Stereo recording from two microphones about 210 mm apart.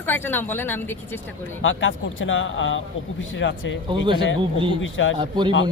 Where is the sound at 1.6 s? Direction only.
65° left (ahead or behind).